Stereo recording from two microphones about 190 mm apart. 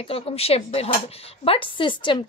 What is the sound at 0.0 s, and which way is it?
A woman's voice, 30° left (ahead or behind).